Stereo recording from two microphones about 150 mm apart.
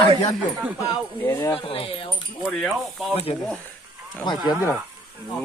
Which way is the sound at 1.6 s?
40° left (ahead or behind).